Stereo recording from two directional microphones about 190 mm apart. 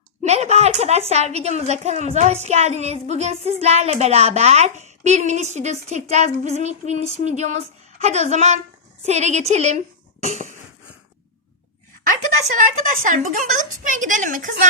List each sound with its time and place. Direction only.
0.2 s a woman's voice: 35° right (ahead or behind)
12.5 s a woman's voice: 45° right (ahead or behind)